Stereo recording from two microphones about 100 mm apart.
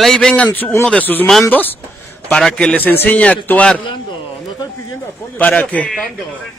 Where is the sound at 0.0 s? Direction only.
5° left (ahead or behind).